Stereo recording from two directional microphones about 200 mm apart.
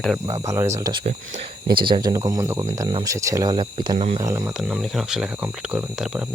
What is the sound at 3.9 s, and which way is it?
Speech, 35° right (ahead or behind).